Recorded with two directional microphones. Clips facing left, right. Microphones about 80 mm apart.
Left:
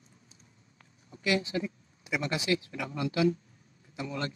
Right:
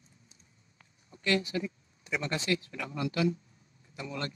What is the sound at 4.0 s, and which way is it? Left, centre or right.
Speech, left.